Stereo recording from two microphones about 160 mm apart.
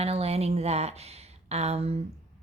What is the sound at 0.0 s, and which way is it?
A woman's voice, 40° right (ahead or behind).